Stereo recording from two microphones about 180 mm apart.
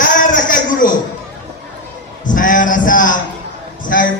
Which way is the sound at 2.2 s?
50° left (ahead or behind).